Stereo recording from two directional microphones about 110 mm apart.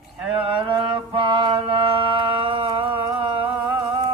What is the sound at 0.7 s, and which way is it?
Mantra, 50° right (ahead or behind).